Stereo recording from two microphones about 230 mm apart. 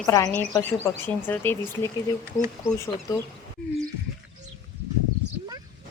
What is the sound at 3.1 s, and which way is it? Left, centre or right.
Speech, centre.